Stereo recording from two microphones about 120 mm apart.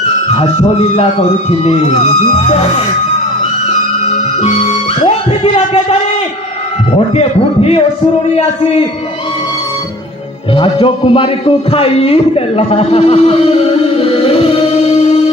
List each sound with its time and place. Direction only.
0.3 s a man's voice: 50° left (ahead or behind)
4.4 s music: 60° left (ahead or behind)
7.1 s a man's voice: 55° left (ahead or behind)
10.5 s a man's voice: 45° left (ahead or behind)